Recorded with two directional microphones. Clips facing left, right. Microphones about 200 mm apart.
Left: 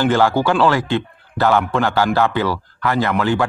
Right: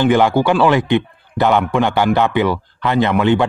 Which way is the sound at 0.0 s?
15° right (ahead or behind).